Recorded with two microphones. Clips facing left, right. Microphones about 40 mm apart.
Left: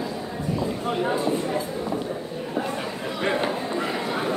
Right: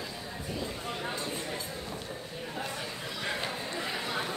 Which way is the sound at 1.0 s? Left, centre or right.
Left.